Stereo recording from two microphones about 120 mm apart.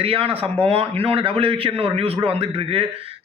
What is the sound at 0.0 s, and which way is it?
A man's voice, 50° right (ahead or behind).